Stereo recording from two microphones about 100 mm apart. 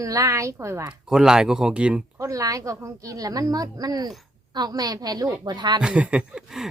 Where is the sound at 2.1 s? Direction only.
35° right (ahead or behind).